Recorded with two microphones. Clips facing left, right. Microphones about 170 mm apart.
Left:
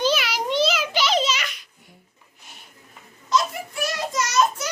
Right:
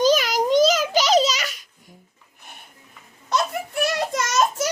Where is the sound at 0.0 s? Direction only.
40° right (ahead or behind).